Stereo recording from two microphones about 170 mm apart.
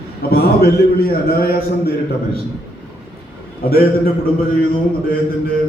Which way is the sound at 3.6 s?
60° left (ahead or behind).